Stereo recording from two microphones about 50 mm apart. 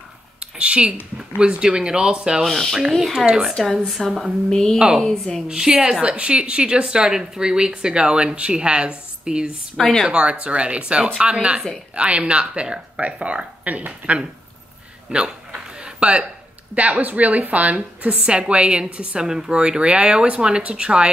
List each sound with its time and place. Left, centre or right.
0.4 s a sound: right
1.1 s a woman's voice: centre
2.4 s a woman's voice: centre
3.3 s a woman's voice: centre
3.5 s a woman's voice: centre
4.5 s a woman's voice: centre
5.5 s a woman's voice: centre
9.8 s a woman's voice: centre
10.0 s a woman's voice: centre
15.0 s a sound: centre
16.7 s a woman's voice: right